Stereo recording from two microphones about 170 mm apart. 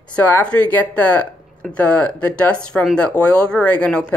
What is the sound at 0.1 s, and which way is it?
Speech, 10° left (ahead or behind).